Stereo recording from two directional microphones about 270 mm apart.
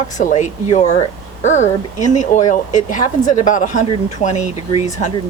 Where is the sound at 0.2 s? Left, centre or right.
Left.